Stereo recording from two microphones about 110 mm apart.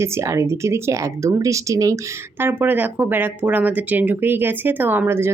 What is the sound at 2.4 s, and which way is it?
Speech, 20° right (ahead or behind).